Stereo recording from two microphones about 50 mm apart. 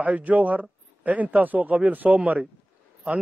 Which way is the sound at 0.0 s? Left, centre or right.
Right.